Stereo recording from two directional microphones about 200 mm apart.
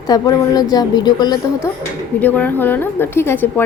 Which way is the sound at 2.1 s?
10° left (ahead or behind).